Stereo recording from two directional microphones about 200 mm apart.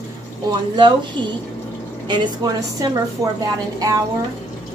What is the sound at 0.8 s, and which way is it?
A woman's voice, 25° right (ahead or behind).